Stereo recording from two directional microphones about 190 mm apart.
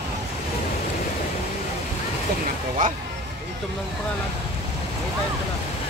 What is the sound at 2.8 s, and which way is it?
Speech, 45° right (ahead or behind).